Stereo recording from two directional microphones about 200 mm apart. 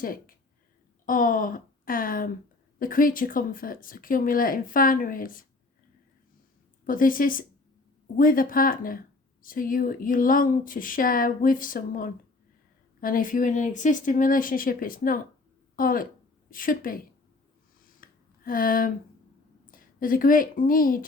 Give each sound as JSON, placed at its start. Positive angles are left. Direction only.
{"t": 0.0, "sound": "speech", "side_deg": 45}
{"t": 6.8, "sound": "speech", "side_deg": 45}
{"t": 18.0, "sound": "a sound", "side_deg": 45}
{"t": 19.7, "sound": "a woman's voice", "side_deg": 45}